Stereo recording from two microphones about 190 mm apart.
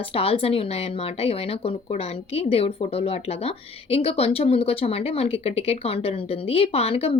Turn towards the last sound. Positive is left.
turn(degrees=30)  # may be behind; listen again after turning